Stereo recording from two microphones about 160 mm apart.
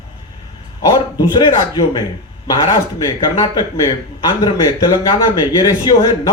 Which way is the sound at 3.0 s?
20° left (ahead or behind).